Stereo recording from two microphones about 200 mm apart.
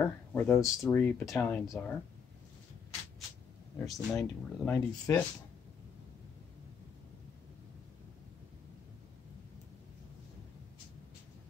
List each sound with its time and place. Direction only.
0.0 s speech: 5° left (ahead or behind)
3.7 s speech: centre (ahead or behind)